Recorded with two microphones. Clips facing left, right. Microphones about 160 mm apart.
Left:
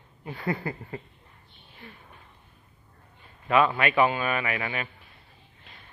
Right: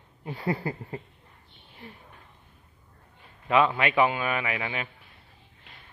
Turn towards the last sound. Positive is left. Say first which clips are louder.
# left 1 dB
turn(degrees=-15)  # may be behind; listen again after turning